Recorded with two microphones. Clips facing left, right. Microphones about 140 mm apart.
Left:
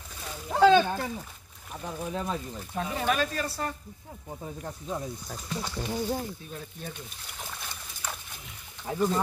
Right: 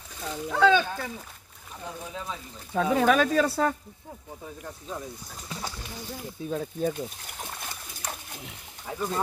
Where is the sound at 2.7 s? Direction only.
85° right.